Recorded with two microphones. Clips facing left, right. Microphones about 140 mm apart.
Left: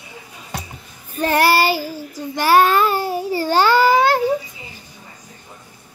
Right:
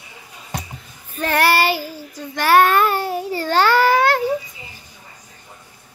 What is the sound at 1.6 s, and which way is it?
Child singing, 35° left (ahead or behind).